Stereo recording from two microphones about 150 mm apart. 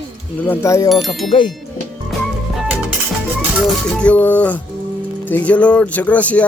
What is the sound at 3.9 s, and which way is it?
Speech, 10° left (ahead or behind).